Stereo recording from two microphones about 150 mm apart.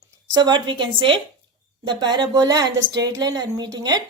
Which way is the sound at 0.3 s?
30° right (ahead or behind).